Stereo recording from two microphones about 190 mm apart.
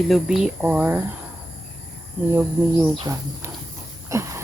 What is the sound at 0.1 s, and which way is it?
Speech, centre (ahead or behind).